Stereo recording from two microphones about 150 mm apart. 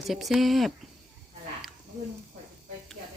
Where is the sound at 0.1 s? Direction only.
Centre (ahead or behind).